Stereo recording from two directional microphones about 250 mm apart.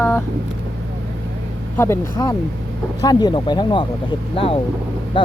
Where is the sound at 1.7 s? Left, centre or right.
Centre.